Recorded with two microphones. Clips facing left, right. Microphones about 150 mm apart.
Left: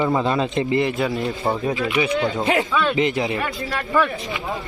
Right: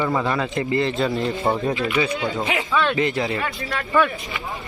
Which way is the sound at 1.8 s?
20° left (ahead or behind).